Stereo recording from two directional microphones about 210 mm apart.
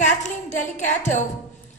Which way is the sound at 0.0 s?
35° left (ahead or behind).